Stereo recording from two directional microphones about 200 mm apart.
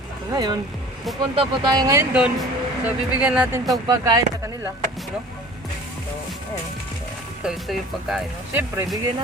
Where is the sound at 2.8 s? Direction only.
5° right (ahead or behind).